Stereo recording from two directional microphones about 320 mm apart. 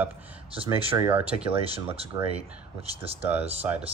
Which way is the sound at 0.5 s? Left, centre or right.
Centre.